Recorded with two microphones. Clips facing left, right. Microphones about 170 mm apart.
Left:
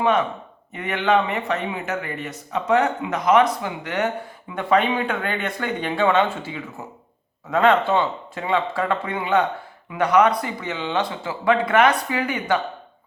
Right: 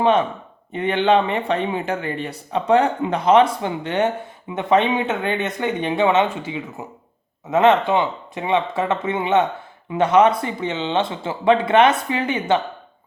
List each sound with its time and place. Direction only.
0.0 s speech: 30° right (ahead or behind)